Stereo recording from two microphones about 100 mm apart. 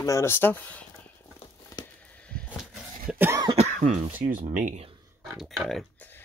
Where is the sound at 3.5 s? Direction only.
90° right.